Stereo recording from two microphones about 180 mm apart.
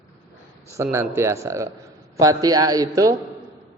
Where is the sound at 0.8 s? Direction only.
15° right (ahead or behind).